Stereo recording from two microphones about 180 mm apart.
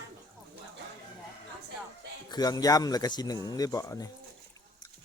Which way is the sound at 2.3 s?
20° left (ahead or behind).